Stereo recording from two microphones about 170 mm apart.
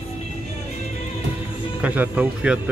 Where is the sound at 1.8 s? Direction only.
10° right (ahead or behind).